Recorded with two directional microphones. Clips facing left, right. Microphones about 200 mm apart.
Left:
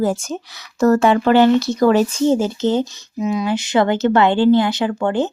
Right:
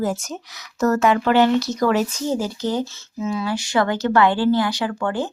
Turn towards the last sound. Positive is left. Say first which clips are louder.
# left 5 dB
turn(degrees=20)  # may be behind; listen again after turning